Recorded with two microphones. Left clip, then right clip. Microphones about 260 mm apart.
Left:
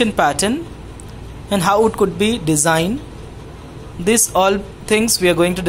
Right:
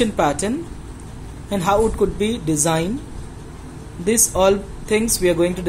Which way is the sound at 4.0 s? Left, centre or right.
Centre.